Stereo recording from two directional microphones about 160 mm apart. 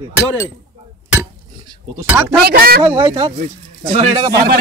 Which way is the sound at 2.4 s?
75° right (ahead or behind).